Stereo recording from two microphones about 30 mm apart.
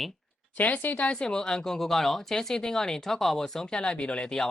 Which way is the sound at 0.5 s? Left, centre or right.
Left.